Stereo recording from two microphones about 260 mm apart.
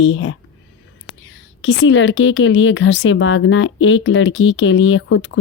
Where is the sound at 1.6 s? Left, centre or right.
Left.